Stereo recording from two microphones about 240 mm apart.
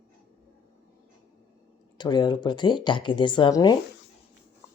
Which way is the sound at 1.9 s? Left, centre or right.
Centre.